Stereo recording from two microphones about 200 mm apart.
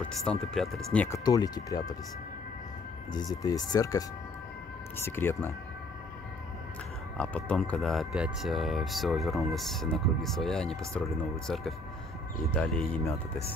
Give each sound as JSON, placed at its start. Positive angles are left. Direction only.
{"t": 0.0, "sound": "speech", "side_deg": 5}
{"t": 3.4, "sound": "speech", "side_deg": 20}
{"t": 7.2, "sound": "speech", "side_deg": 5}